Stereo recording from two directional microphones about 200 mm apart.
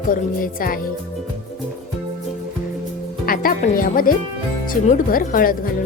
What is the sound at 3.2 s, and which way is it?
A woman's voice, 45° left (ahead or behind).